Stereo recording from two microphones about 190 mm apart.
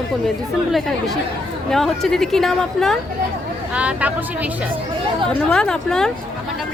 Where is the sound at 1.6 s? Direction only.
Centre (ahead or behind).